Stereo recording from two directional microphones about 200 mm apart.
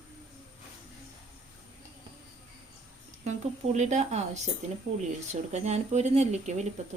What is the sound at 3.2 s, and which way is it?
Speech, 35° right (ahead or behind).